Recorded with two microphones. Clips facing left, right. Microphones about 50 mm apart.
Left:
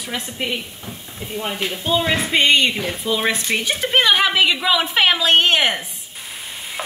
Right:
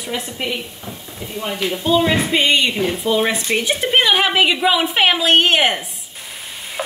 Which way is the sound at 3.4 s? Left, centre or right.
Centre.